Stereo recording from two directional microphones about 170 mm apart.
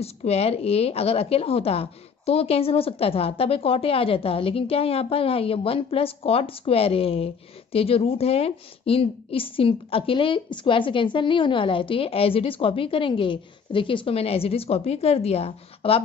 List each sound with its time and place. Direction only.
0.0 s a woman's voice: 35° left (ahead or behind)